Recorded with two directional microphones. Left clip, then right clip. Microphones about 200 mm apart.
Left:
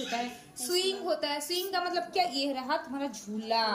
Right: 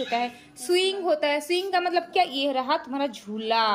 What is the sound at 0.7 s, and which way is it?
A woman's voice, 15° right (ahead or behind).